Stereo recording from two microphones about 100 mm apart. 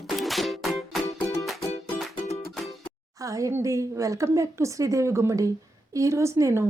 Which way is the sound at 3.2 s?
35° right (ahead or behind).